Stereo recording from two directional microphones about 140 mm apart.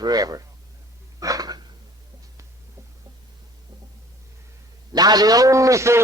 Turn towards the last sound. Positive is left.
turn(degrees=-20)  # may be behind; listen again after turning